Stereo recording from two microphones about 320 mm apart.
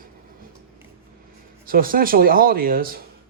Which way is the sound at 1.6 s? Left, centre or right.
Right.